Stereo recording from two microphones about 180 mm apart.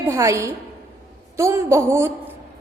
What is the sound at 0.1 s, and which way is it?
A woman's voice, 15° right (ahead or behind).